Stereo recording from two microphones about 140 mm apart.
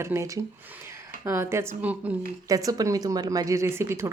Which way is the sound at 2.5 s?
25° right (ahead or behind).